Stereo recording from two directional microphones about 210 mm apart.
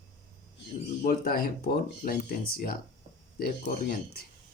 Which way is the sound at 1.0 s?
45° left (ahead or behind).